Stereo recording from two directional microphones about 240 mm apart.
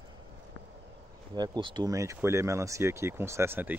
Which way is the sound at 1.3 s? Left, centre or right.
Centre.